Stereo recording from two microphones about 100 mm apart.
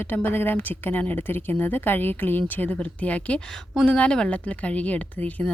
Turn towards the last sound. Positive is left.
turn(degrees=15)  # may be behind; listen again after turning